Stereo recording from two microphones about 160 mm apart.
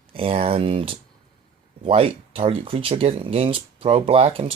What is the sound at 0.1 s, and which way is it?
Speech, 35° right (ahead or behind).